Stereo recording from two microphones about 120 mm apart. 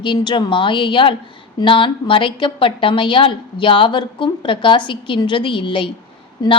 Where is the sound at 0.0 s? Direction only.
40° left (ahead or behind).